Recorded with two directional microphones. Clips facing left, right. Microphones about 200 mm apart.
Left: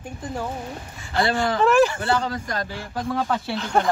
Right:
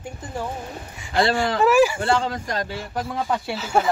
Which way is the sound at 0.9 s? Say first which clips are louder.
Right 3 dB; 15° right (ahead or behind).